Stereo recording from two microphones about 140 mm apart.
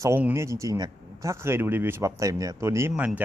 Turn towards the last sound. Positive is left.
turn(degrees=-10)  # may be behind; listen again after turning